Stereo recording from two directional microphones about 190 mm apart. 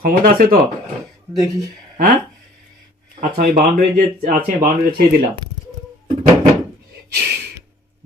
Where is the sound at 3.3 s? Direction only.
45° right (ahead or behind).